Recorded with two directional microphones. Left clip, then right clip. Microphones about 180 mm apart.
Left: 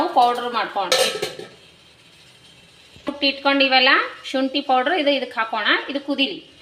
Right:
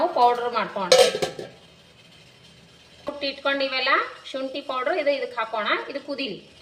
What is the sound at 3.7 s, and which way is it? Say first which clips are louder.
A woman's voice: left 7 dB; 45° left (ahead or behind).